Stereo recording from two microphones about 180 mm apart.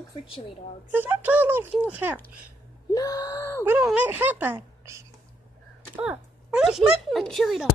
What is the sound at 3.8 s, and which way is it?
Speech, 10° right (ahead or behind).